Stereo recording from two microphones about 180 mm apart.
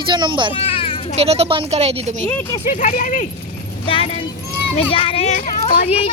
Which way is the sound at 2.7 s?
45° left (ahead or behind).